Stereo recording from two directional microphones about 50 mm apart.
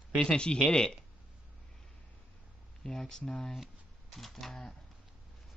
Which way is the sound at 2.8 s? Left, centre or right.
Centre.